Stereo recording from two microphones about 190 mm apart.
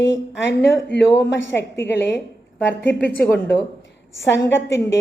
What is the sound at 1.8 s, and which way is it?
Speech, 65° left (ahead or behind).